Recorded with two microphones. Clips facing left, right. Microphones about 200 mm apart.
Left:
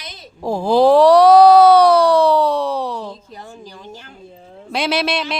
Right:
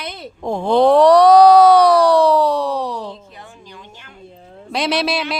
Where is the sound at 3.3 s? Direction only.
40° left (ahead or behind).